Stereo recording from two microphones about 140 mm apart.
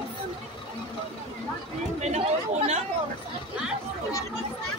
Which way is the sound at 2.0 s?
50° right (ahead or behind).